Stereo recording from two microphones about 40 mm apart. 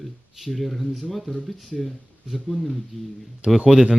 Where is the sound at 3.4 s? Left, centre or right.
Right.